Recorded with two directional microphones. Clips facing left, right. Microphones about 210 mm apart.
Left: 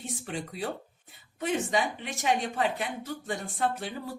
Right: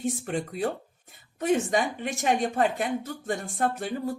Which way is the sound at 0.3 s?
50° right (ahead or behind).